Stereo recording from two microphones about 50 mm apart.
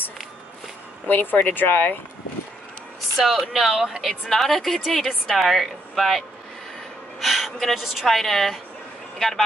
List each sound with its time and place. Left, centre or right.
1.0 s speech: left
3.2 s a woman's voice: centre
4.3 s a woman's voice: centre
7.2 s a sound: centre
7.7 s a woman's voice: centre